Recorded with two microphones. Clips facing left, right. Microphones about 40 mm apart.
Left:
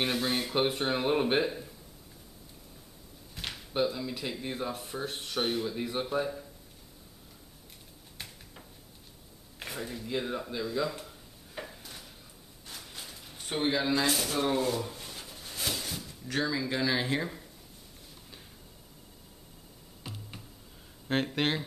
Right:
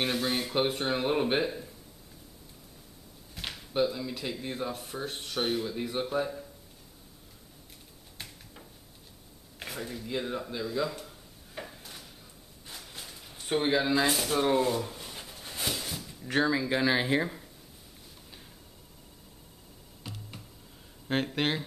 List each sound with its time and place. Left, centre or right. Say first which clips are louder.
0.0 s speech: even; centre
3.3 s speech: right 2 dB; centre
8.2 s a sound: even; centre
9.6 s speech: even; centre
11.1 s dishes: even; centre
12.6 s a sound: even; centre
16.3 s speech: right 4 dB; right
20.0 s a sound: even; centre
21.1 s speech: even; centre